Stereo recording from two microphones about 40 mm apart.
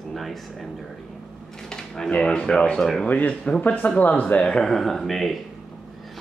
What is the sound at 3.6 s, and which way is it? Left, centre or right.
Speech, left.